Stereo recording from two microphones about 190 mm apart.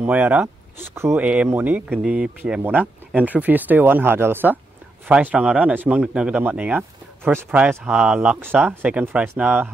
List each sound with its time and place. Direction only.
0.0 s speech: 10° right (ahead or behind)